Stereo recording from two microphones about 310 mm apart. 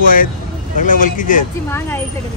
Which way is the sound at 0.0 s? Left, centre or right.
Left.